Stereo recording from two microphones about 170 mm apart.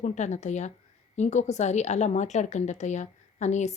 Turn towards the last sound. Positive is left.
turn(degrees=45)  # may be behind; listen again after turning